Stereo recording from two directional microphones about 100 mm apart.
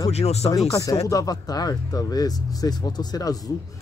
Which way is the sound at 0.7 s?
35° left (ahead or behind).